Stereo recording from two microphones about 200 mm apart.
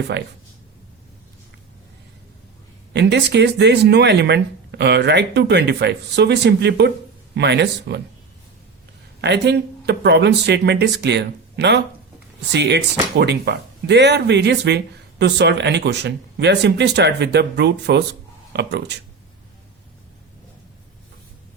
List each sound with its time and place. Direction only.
0.1 s speech: 60° right (ahead or behind)
2.9 s speech: 60° right (ahead or behind)
9.2 s speech: 60° right (ahead or behind)